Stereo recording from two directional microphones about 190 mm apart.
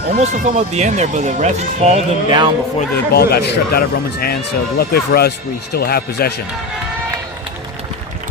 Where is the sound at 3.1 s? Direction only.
55° left (ahead or behind).